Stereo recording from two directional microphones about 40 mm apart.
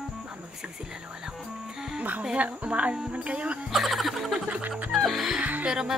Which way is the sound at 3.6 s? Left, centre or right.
Centre.